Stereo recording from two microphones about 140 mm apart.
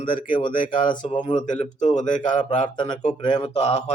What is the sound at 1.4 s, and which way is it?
Speech, 60° left (ahead or behind).